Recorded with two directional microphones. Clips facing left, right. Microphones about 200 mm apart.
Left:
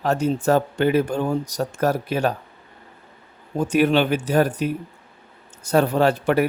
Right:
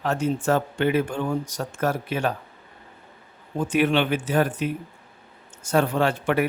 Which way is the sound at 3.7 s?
40° left (ahead or behind).